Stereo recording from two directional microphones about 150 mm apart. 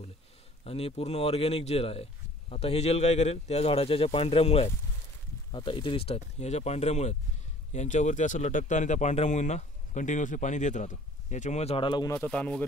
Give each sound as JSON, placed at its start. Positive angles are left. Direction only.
{"t": 0.7, "sound": "speech", "side_deg": 40}
{"t": 12.1, "sound": "speech", "side_deg": 5}